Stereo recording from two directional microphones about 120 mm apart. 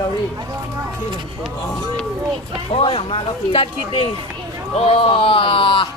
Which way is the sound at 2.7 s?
50° left (ahead or behind).